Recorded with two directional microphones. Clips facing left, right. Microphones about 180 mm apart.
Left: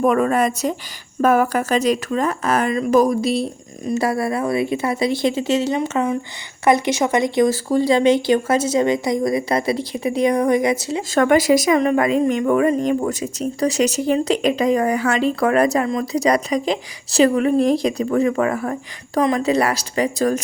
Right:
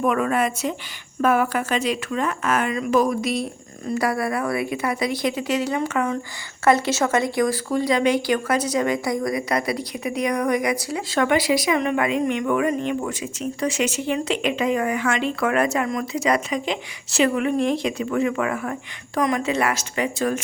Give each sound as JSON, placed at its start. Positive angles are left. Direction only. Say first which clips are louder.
{"t": 0.0, "sound": "a woman's voice", "louder": "left 4 dB", "side_deg": 40}
{"t": 11.1, "sound": "a woman's voice", "louder": "left 5 dB", "side_deg": 45}